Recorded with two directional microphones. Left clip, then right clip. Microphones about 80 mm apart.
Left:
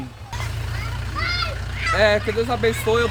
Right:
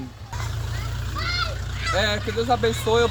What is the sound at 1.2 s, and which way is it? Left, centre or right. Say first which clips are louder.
Vehicle: left 2 dB; right.